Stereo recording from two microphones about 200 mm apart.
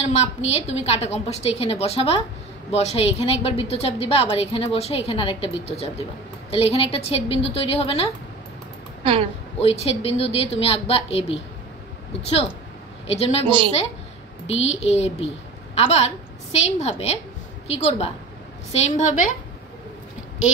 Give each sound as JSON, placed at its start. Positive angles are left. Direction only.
{"t": 0.0, "sound": "a woman's voice", "side_deg": 30}
{"t": 9.0, "sound": "speech", "side_deg": -30}
{"t": 9.6, "sound": "a woman's voice", "side_deg": 30}
{"t": 13.5, "sound": "a woman's voice", "side_deg": -25}
{"t": 14.7, "sound": "a woman's voice", "side_deg": 30}